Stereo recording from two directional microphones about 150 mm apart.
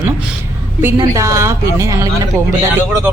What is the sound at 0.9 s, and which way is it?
Speech, 20° right (ahead or behind).